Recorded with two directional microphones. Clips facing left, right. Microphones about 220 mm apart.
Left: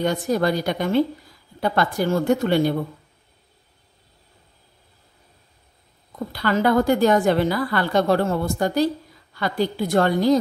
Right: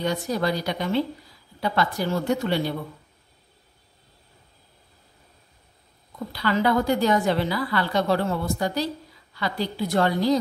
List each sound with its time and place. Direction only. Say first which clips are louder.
0.0 s a woman's voice: left 4 dB; 50° left (ahead or behind)
6.3 s a woman's voice: left 3 dB; 50° left (ahead or behind)